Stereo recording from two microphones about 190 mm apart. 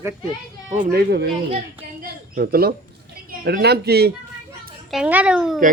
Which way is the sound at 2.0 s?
50° right (ahead or behind).